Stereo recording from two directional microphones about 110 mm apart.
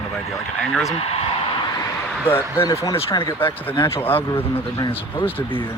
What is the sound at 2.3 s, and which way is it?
Speech, 20° left (ahead or behind).